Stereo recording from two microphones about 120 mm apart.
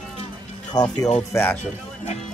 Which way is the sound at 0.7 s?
35° left (ahead or behind).